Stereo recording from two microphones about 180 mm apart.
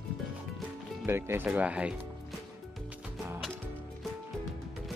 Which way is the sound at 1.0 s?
15° right (ahead or behind).